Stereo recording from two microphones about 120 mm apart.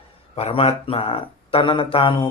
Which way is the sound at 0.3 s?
55° left (ahead or behind).